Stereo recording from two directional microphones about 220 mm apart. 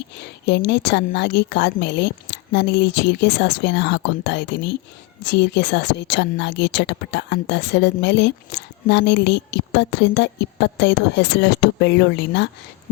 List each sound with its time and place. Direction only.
0.2 s a woman's voice: 50° left (ahead or behind)